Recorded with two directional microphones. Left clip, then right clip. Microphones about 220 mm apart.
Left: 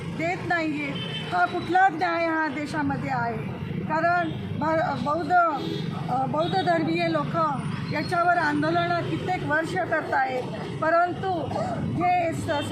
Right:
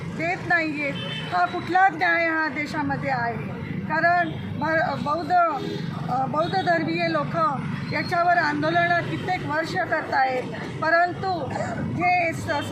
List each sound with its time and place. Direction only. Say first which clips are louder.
0.2 s speech: right 3 dB; 5° left (ahead or behind)